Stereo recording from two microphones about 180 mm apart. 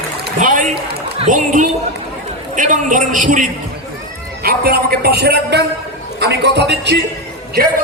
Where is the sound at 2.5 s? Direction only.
45° right (ahead or behind).